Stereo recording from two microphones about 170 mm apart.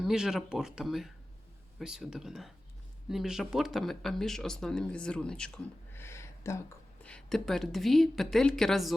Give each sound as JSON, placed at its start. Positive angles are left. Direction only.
{"t": 0.0, "sound": "speech", "side_deg": -5}
{"t": 5.9, "sound": "a sound", "side_deg": 15}
{"t": 7.0, "sound": "speech", "side_deg": 5}